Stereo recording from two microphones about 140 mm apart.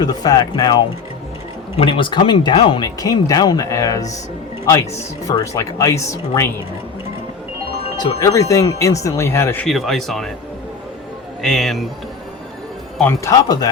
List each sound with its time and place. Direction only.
0.0 s speech: 30° left (ahead or behind)
5.4 s speech: 25° left (ahead or behind)
7.9 s speech: 25° left (ahead or behind)
9.6 s speech: centre (ahead or behind)
11.4 s speech: 5° left (ahead or behind)
13.1 s speech: 25° left (ahead or behind)